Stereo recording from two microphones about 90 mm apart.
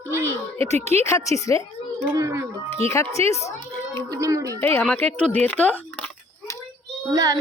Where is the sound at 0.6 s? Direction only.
35° left (ahead or behind).